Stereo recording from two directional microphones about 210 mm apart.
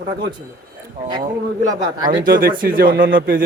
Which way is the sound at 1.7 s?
20° right (ahead or behind).